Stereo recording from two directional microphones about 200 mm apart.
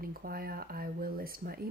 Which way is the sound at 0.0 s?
45° right (ahead or behind).